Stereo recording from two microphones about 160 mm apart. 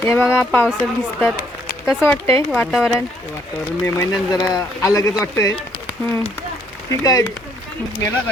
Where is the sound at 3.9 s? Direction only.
20° left (ahead or behind).